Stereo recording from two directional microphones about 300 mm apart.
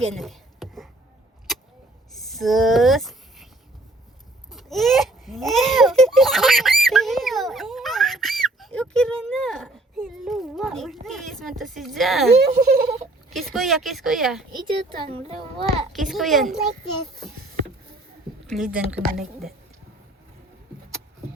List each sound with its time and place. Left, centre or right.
0.0 s a sound: centre
2.1 s a sound: centre
4.5 s speech: centre
12.4 s a child's voice: right
13.3 s speech: centre
15.1 s a child's voice: centre
15.9 s speech: centre
18.4 s speech: centre